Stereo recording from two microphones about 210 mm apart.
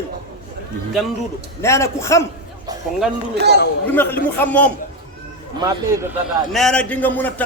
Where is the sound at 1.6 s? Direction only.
15° left (ahead or behind).